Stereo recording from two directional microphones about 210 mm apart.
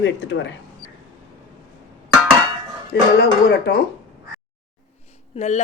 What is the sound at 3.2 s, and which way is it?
Speech, 55° left (ahead or behind).